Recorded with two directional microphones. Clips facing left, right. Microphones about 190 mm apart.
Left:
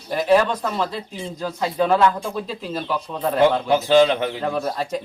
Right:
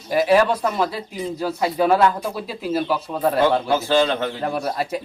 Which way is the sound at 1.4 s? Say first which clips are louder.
Right 1 dB; 10° right (ahead or behind).